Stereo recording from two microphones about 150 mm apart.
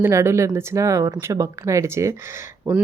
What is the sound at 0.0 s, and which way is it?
Speech, 20° right (ahead or behind).